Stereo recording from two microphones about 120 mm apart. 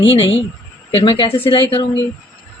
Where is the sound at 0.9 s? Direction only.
45° left (ahead or behind).